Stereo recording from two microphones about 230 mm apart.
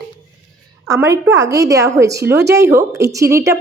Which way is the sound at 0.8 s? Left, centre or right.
Centre.